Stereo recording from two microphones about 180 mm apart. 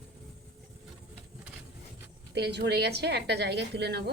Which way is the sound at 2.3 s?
65° right (ahead or behind).